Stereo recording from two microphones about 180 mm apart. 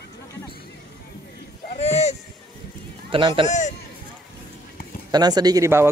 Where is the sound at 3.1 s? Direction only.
30° right (ahead or behind).